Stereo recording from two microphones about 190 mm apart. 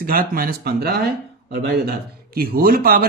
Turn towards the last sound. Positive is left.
turn(degrees=-50)  # may be behind; listen again after turning